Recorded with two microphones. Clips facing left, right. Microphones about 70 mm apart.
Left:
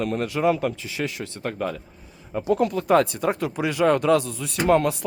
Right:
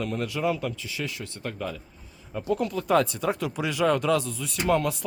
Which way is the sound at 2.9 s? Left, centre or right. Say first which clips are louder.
Left 2 dB; left.